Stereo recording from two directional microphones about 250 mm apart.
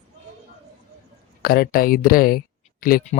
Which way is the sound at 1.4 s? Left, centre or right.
Left.